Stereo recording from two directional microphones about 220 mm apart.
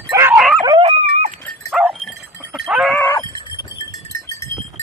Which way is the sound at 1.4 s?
Centre (ahead or behind).